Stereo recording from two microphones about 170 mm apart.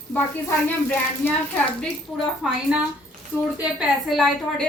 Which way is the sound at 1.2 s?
10° left (ahead or behind).